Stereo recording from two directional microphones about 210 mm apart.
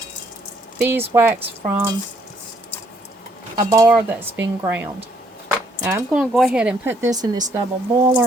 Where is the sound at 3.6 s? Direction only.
15° right (ahead or behind).